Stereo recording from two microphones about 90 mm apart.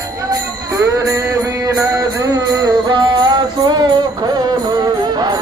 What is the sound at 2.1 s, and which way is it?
Music, 40° right (ahead or behind).